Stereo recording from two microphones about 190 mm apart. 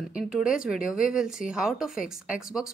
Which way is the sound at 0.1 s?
5° right (ahead or behind).